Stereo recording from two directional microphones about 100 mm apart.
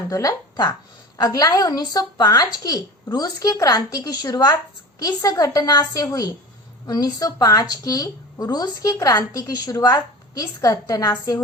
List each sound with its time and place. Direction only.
0.1 s a woman's voice: 35° left (ahead or behind)